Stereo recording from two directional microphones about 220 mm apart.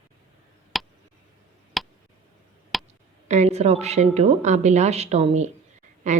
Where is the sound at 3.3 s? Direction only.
30° right (ahead or behind).